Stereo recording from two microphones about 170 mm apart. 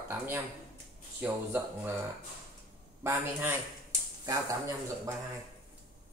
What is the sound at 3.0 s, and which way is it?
Speech, 15° right (ahead or behind).